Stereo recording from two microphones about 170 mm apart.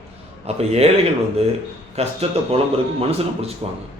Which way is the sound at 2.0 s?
35° right (ahead or behind).